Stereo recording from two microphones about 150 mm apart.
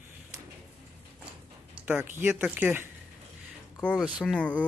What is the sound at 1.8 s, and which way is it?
Speech, 10° right (ahead or behind).